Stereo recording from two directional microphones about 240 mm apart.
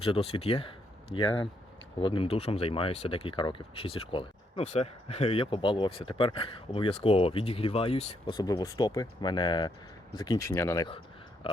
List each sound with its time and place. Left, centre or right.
0.0 s speech: left